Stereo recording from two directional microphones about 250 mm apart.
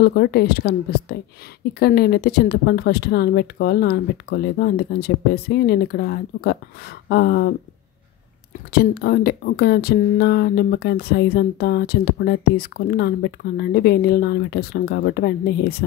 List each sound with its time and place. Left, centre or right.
0.0 s speech: left
8.7 s speech: left